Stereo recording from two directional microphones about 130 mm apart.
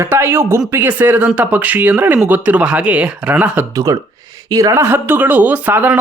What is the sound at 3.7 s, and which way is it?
Speech, 25° right (ahead or behind).